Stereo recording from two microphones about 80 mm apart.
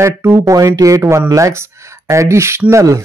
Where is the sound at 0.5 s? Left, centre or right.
Right.